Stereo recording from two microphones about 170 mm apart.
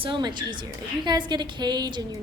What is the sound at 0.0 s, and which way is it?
A woman's voice, 30° right (ahead or behind).